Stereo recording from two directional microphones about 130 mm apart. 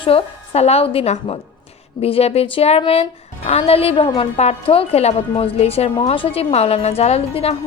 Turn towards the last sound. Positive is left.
turn(degrees=50)  # may be behind; listen again after turning